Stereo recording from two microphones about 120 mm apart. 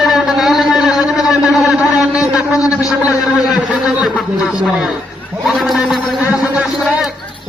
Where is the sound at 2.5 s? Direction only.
30° left (ahead or behind).